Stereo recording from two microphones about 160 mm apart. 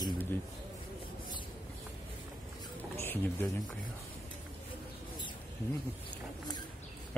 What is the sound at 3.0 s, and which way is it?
Speech, 15° left (ahead or behind).